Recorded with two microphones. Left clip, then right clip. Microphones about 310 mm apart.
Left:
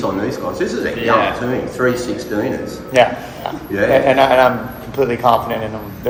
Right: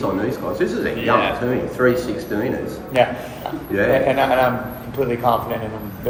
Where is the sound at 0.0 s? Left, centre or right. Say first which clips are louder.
Left 2 dB; centre.